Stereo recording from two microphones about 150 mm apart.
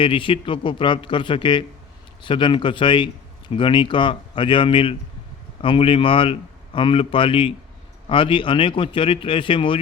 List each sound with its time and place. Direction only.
0.0 s speech: 35° left (ahead or behind)